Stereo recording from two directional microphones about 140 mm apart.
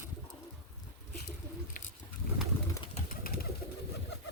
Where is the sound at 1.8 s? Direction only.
90° left.